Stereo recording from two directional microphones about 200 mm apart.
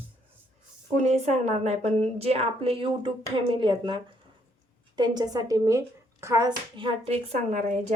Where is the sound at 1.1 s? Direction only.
35° right (ahead or behind).